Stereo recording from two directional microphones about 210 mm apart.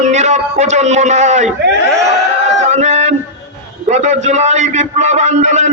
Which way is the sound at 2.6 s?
35° right (ahead or behind).